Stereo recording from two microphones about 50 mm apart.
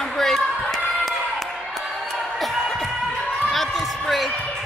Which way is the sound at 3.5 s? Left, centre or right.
Centre.